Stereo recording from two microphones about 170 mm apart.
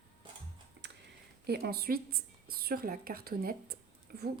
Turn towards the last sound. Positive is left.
turn(degrees=-65)  # may be behind; listen again after turning